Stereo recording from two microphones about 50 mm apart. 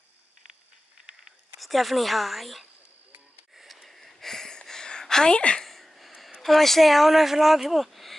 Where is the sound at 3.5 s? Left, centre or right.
Centre.